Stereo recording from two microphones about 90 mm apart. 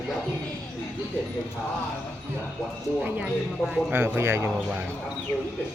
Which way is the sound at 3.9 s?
25° right (ahead or behind).